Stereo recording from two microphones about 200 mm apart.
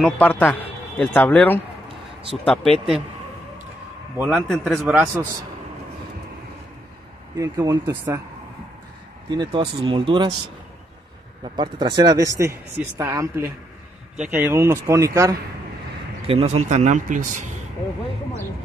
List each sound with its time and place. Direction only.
0.0 s a man's voice: 10° left (ahead or behind)
4.2 s a man's voice: centre (ahead or behind)
7.3 s speech: 15° right (ahead or behind)
9.3 s speech: 25° right (ahead or behind)
11.5 s speech: 20° right (ahead or behind)
16.3 s speech: 35° right (ahead or behind)